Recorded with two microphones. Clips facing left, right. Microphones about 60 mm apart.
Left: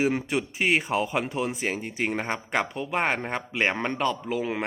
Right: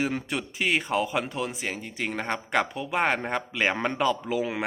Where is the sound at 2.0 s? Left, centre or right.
Centre.